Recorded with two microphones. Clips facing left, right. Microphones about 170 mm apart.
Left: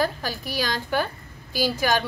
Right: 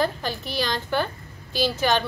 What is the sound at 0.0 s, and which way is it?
Speech, 10° left (ahead or behind).